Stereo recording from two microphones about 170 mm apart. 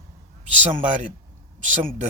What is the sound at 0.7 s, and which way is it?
Speech, 50° right (ahead or behind).